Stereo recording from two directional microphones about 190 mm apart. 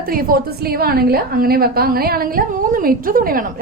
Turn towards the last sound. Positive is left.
turn(degrees=-45)  # may be behind; listen again after turning